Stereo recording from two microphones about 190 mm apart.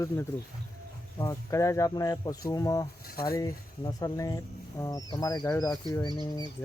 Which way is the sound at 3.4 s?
20° left (ahead or behind).